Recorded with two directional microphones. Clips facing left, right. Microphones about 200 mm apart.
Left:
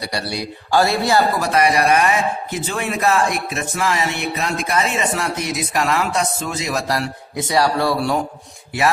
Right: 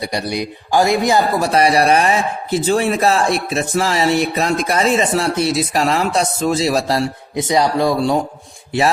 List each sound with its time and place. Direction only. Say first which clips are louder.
0.0 s speech: right 4 dB; 20° right (ahead or behind)
1.4 s a man's voice: right 3 dB; 30° right (ahead or behind)